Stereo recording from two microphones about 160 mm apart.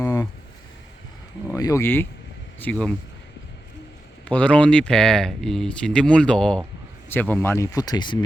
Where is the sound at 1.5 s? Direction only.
20° left (ahead or behind).